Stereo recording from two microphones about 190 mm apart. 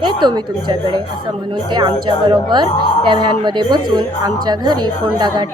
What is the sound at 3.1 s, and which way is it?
A woman's voice, 25° right (ahead or behind).